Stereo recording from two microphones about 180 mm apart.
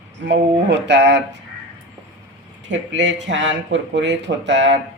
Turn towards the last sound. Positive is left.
turn(degrees=-80)